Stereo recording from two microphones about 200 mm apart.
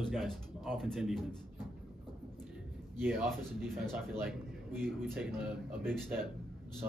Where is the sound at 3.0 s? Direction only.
10° right (ahead or behind).